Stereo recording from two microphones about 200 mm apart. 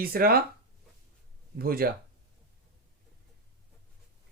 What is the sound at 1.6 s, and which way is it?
Speech, 50° right (ahead or behind).